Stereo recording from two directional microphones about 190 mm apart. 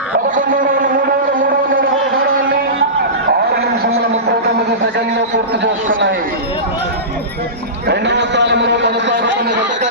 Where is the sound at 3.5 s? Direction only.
55° right (ahead or behind).